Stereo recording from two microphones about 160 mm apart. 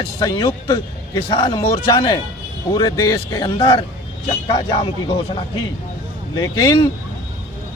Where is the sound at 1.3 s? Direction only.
35° left (ahead or behind).